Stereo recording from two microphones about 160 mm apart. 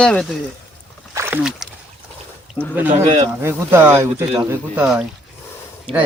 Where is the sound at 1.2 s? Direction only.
15° right (ahead or behind).